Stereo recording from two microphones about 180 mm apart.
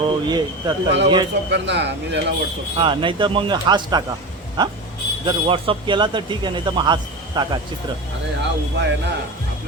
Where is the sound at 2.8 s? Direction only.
25° right (ahead or behind).